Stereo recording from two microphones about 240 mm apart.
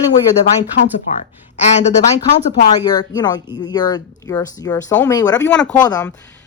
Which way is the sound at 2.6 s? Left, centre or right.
Centre.